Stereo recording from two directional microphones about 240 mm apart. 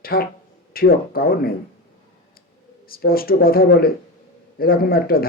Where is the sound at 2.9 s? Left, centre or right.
Left.